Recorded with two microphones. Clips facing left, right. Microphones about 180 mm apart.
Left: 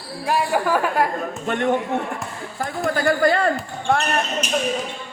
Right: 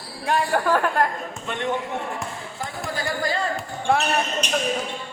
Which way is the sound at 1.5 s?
50° left (ahead or behind).